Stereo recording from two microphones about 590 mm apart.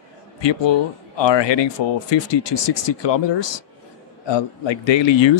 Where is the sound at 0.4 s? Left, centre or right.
Left.